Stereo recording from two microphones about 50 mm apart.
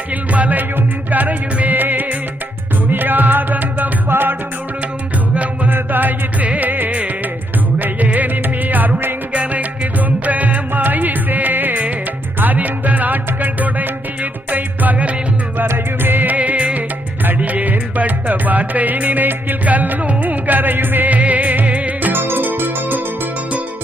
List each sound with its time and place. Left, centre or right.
0.1 s music: right
4.1 s music: right
5.7 s music: right
15.5 s music: right
22.1 s music: right